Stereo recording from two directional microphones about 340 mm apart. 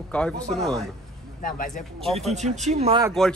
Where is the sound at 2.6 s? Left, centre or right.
Centre.